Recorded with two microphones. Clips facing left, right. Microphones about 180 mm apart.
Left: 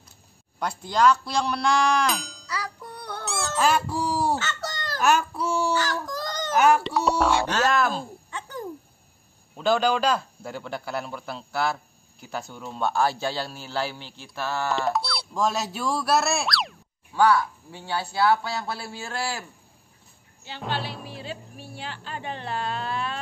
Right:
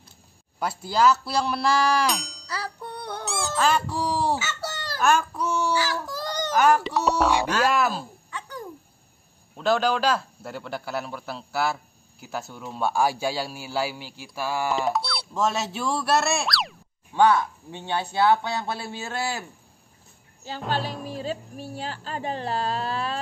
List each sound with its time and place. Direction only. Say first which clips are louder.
0.6 s a man's voice: even; 5° right (ahead or behind)
2.5 s music: right 1 dB; 30° right (ahead or behind)
3.3 s a sound: even; centre (ahead or behind)
4.4 s chicken: even; 10° right (ahead or behind)
5.0 s child singing: even; 10° left (ahead or behind)
5.7 s baby cry: even; 5° right (ahead or behind)
6.5 s speech: left 1 dB; 10° left (ahead or behind)
7.2 s speech: even; 10° right (ahead or behind)
8.3 s a sound: right 1 dB; 25° left (ahead or behind)
9.6 s a man's voice: even; centre (ahead or behind)
14.9 s speech: even; centre (ahead or behind)
17.1 s speech: right 1 dB; 20° right (ahead or behind)
20.5 s a woman's voice: right 3 dB; 40° right (ahead or behind)